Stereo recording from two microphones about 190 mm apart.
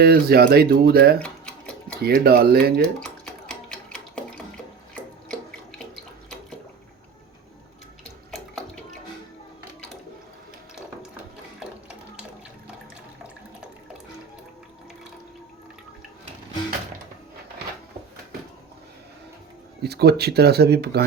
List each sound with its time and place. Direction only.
0.0 s speech: 55° right (ahead or behind)
1.2 s tick-tock: 5° left (ahead or behind)
2.0 s speech: 55° right (ahead or behind)
3.0 s a sound: 5° left (ahead or behind)
8.3 s bathtub: centre (ahead or behind)
19.8 s speech: 55° right (ahead or behind)